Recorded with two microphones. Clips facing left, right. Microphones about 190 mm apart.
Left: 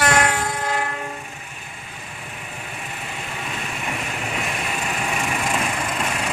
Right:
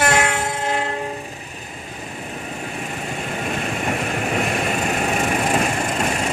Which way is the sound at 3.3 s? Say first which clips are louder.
Right 7 dB; 50° right (ahead or behind).